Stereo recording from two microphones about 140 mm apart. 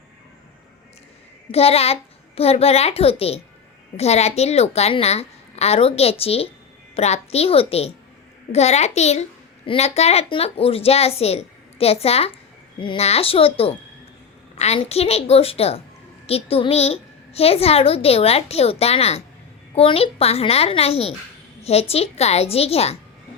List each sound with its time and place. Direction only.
1.5 s a woman's voice: 45° left (ahead or behind)